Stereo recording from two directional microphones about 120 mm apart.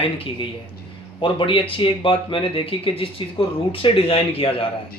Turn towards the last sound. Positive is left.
turn(degrees=50)  # may be behind; listen again after turning